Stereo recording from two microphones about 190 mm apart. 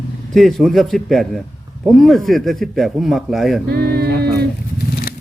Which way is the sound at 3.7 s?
55° right (ahead or behind).